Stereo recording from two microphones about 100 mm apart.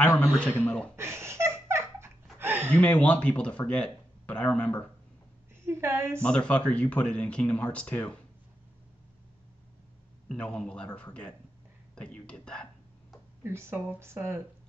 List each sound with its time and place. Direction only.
0.0 s speech: 10° left (ahead or behind)
0.9 s laughter: 25° right (ahead or behind)
2.3 s a sound: 20° right (ahead or behind)
2.7 s speech: 10° left (ahead or behind)
5.7 s speech: 25° right (ahead or behind)
6.2 s speech: 10° left (ahead or behind)
10.2 s speech: 10° left (ahead or behind)
13.4 s speech: 25° right (ahead or behind)